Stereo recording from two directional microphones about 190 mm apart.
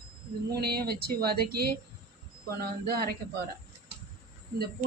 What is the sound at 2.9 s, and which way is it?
Speech, 55° right (ahead or behind).